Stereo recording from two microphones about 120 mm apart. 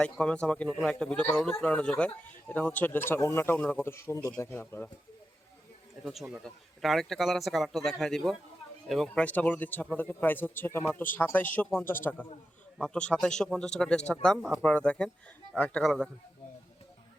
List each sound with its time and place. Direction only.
0.0 s a man's voice: 10° left (ahead or behind)
6.1 s a man's voice: 5° right (ahead or behind)
9.2 s a man's voice: 15° left (ahead or behind)